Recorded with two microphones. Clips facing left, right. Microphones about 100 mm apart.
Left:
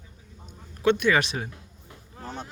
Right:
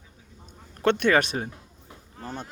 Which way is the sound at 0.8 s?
55° right (ahead or behind).